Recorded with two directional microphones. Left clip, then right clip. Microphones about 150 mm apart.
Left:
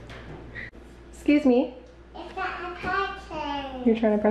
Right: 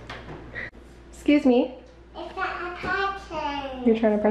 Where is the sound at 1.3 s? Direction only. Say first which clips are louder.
Right 1 dB; 15° right (ahead or behind).